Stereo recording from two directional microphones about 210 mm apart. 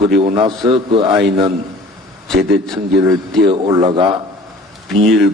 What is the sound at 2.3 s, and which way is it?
Speech, 45° right (ahead or behind).